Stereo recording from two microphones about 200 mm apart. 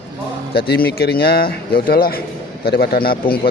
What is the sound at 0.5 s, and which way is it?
Speech, 50° left (ahead or behind).